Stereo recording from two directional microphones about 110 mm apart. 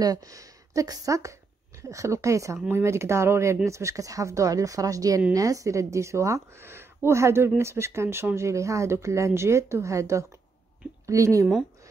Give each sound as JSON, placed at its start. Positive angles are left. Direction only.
{"t": 0.0, "sound": "a woman's voice", "side_deg": -35}